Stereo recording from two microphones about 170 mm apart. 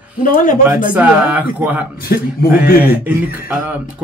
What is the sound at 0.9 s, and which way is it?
Speech, 10° right (ahead or behind).